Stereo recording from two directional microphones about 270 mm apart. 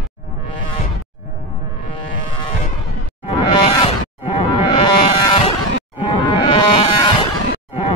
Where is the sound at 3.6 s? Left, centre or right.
Centre.